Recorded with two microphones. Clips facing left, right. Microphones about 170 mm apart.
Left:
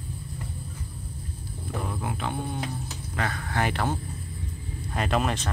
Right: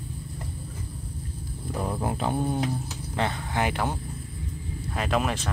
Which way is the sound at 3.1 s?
25° right (ahead or behind).